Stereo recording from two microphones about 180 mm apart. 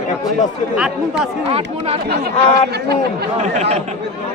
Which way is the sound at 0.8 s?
5° right (ahead or behind).